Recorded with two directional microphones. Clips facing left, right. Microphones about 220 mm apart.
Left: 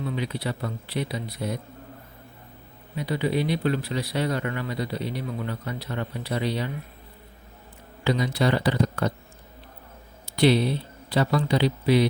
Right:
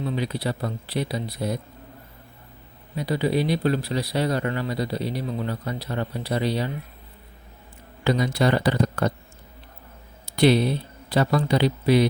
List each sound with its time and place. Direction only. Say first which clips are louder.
0.0 s speech: right 3 dB; 35° right (ahead or behind)
3.1 s speech: right 2 dB; 35° right (ahead or behind)
8.0 s speech: right 2 dB; 50° right (ahead or behind)
11.1 s speech: right 2 dB; 45° right (ahead or behind)